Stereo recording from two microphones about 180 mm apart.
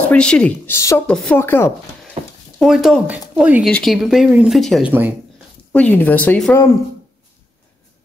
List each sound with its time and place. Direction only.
0.0 s speech: 5° left (ahead or behind)
1.1 s speech: 5° left (ahead or behind)
2.2 s a sound: 35° right (ahead or behind)
2.6 s speech: centre (ahead or behind)
3.6 s speech: centre (ahead or behind)